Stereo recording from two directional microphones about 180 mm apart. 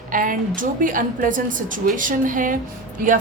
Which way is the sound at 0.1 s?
50° right (ahead or behind).